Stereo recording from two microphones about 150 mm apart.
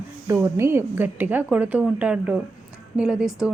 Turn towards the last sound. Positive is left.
turn(degrees=-5)  # may be behind; listen again after turning